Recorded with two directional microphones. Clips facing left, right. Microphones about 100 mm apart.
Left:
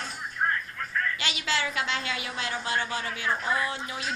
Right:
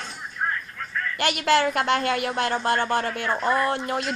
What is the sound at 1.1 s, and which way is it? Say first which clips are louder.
A woman's voice: right 10 dB; 55° right (ahead or behind).